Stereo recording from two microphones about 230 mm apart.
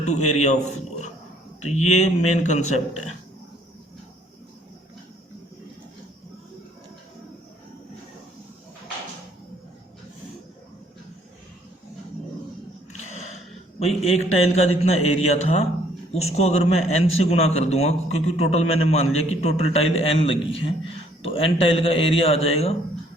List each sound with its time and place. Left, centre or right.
0.0 s a man's voice: left
12.9 s a sound: left
13.7 s a man's voice: left